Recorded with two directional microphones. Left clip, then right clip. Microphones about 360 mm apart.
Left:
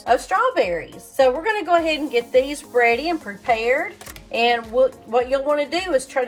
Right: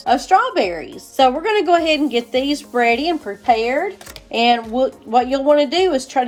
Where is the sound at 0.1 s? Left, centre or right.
Right.